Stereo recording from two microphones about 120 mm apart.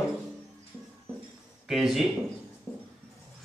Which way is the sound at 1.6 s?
Centre (ahead or behind).